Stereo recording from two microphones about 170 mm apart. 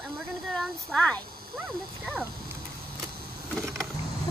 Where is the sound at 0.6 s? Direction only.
5° left (ahead or behind).